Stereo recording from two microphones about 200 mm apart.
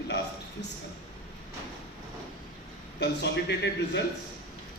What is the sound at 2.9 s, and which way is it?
A man's voice, 55° left (ahead or behind).